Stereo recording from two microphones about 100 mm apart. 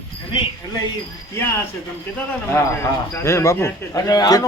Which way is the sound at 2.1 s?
25° left (ahead or behind).